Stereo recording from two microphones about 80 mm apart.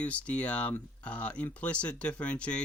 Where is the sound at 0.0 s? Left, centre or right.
Centre.